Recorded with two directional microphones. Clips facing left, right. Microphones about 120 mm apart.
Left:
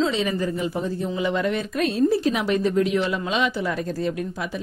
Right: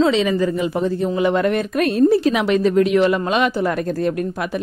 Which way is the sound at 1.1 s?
55° right (ahead or behind).